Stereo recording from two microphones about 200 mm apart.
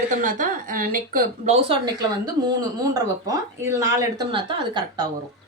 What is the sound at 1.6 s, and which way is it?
A woman's voice, 20° right (ahead or behind).